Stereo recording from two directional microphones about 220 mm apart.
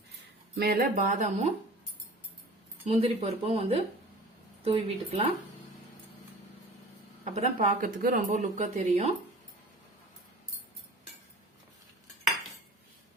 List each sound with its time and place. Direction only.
0.5 s speech: 45° right (ahead or behind)
2.8 s speech: 30° right (ahead or behind)
7.3 s speech: 30° right (ahead or behind)